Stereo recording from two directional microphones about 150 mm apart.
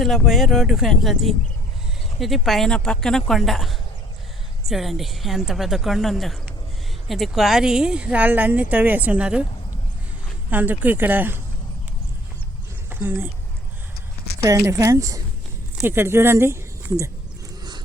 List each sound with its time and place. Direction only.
0.0 s a woman's voice: centre (ahead or behind)
10.5 s speech: 10° right (ahead or behind)
12.9 s speech: 15° right (ahead or behind)
14.4 s a woman's voice: 20° right (ahead or behind)